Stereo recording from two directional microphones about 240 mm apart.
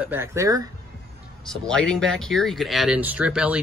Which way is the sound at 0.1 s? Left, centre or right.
Centre.